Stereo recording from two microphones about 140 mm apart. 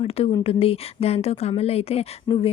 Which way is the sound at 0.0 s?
45° left (ahead or behind).